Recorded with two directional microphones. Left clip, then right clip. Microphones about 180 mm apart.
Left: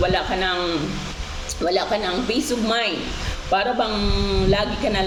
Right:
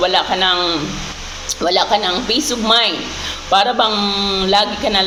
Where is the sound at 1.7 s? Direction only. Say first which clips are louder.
Right 7 dB; 15° left (ahead or behind).